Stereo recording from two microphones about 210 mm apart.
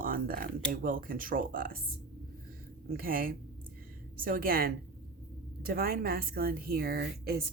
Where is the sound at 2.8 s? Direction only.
45° right (ahead or behind).